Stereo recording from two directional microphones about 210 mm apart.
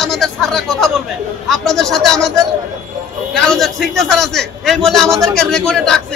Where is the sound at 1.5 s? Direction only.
Centre (ahead or behind).